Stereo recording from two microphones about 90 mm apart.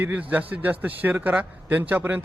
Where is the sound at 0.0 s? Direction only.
20° right (ahead or behind).